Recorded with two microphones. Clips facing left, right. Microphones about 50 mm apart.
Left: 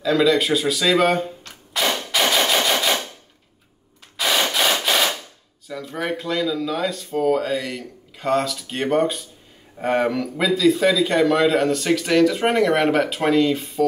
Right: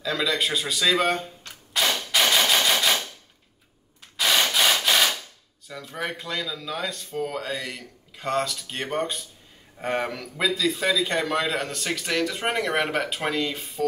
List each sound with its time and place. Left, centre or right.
0.0 s a man's voice: centre
1.5 s a sound: centre
1.9 s gunshot: left
2.2 s machine gun: centre
4.2 s rub: centre
5.7 s a man's voice: centre